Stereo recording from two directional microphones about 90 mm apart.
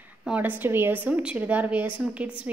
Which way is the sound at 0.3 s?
20° right (ahead or behind).